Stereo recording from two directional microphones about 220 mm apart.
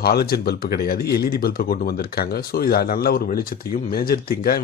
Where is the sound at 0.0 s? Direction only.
45° left (ahead or behind).